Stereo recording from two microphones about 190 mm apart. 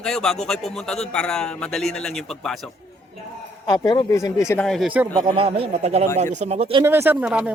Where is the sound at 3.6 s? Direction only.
20° left (ahead or behind).